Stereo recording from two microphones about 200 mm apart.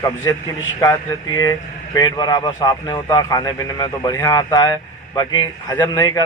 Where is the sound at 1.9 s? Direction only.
20° left (ahead or behind).